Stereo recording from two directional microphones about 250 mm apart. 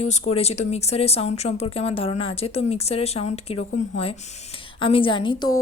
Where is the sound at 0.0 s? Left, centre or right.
Left.